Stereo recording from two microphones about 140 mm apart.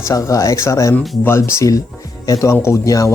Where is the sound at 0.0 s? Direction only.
20° left (ahead or behind).